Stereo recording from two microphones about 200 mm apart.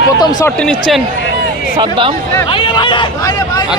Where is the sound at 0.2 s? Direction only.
20° left (ahead or behind).